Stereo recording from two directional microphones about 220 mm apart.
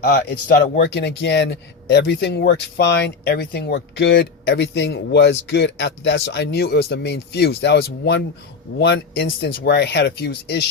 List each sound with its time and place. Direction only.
0.0 s a man's voice: 50° left (ahead or behind)